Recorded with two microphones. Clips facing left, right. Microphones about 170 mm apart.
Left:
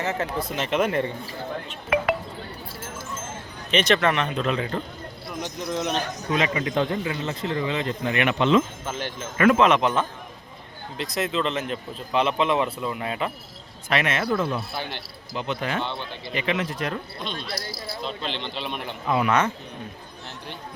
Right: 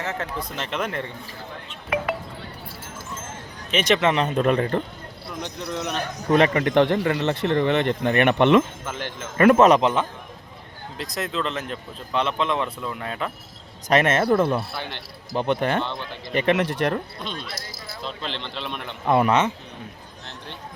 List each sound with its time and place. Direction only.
0.0 s speech: 5° left (ahead or behind)
1.9 s wind chime: 80° left
3.7 s speech: 10° right (ahead or behind)
4.1 s speech: 35° right (ahead or behind)
4.4 s speech: 50° right (ahead or behind)
5.6 s speech: 20° left (ahead or behind)
6.2 s a man's voice: 55° right (ahead or behind)
9.5 s speech: 40° right (ahead or behind)
9.8 s speech: 15° right (ahead or behind)
10.9 s speech: centre (ahead or behind)
13.9 s a man's voice: 50° right (ahead or behind)
18.0 s speech: centre (ahead or behind)
19.0 s speech: 50° right (ahead or behind)